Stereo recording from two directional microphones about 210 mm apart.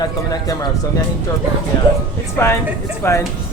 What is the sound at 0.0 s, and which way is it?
Speech, 20° left (ahead or behind).